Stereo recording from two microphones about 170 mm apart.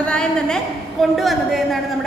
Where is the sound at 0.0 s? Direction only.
5° left (ahead or behind).